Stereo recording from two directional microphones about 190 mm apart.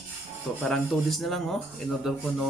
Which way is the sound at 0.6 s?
Centre (ahead or behind).